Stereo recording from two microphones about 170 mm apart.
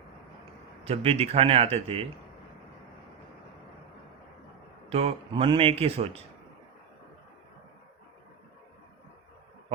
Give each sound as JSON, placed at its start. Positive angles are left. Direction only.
{"t": 0.9, "sound": "speech", "side_deg": -35}
{"t": 4.9, "sound": "speech", "side_deg": -35}